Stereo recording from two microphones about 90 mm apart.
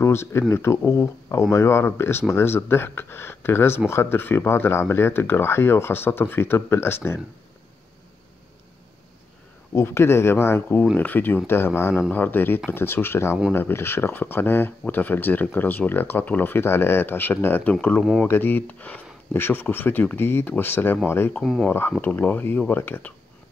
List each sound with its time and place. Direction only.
0.0 s speech: 30° left (ahead or behind)
9.8 s speech: 30° left (ahead or behind)
21.3 s speech: 10° left (ahead or behind)
22.0 s speech: 20° left (ahead or behind)